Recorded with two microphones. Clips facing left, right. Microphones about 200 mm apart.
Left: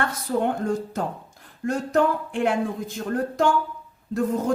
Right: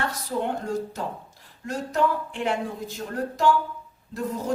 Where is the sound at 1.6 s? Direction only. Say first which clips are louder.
Left 4 dB; 50° left (ahead or behind).